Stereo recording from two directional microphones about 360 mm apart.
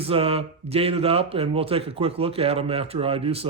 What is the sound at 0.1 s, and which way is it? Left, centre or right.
Speech, centre.